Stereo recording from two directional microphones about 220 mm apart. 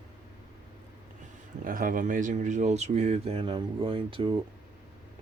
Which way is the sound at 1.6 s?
40° right (ahead or behind).